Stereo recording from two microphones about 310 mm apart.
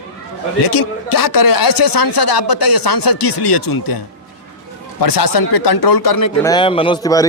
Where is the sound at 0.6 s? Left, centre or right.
Left.